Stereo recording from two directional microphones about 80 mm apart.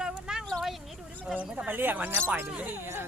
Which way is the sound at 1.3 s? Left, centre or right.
Centre.